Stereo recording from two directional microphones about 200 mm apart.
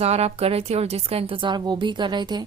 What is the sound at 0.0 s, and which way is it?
A woman's voice, 30° right (ahead or behind).